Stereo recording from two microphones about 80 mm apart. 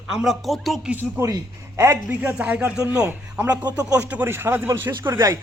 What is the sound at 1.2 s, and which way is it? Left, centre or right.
A man's voice, right.